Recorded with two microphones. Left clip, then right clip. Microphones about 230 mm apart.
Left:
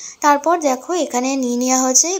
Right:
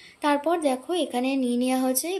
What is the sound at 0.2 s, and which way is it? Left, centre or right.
Speech, centre.